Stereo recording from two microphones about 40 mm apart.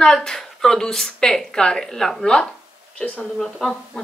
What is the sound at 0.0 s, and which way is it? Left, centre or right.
A woman's voice, centre.